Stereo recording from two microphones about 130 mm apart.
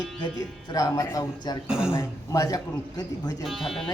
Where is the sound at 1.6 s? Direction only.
5° right (ahead or behind).